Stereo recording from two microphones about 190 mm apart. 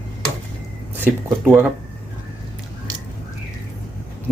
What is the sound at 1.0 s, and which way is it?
Speech, 10° right (ahead or behind).